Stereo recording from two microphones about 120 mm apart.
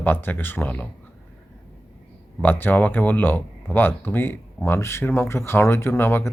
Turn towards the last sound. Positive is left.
turn(degrees=20)  # may be behind; listen again after turning